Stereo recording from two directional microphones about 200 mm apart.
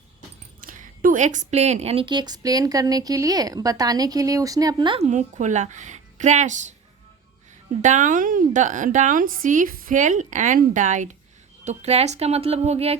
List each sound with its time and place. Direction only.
0.6 s a woman's voice: 45° right (ahead or behind)
7.8 s a woman's voice: 40° right (ahead or behind)